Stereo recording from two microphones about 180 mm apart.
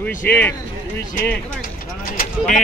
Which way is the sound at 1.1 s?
50° left (ahead or behind).